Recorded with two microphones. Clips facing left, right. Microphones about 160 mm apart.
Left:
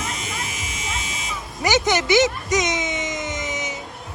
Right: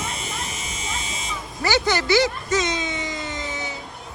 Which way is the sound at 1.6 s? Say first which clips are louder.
Left 2 dB; 20° left (ahead or behind).